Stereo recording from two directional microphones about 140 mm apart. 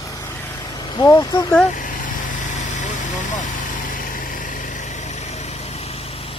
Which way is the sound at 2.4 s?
60° left (ahead or behind).